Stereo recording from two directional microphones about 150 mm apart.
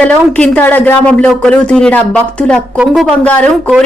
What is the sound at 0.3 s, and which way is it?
A woman's voice, 10° left (ahead or behind).